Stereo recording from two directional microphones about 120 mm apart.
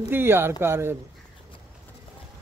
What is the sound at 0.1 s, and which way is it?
Speech, 20° right (ahead or behind).